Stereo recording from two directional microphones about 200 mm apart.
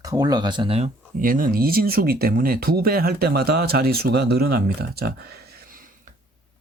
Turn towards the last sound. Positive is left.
turn(degrees=-45)  # may be behind; listen again after turning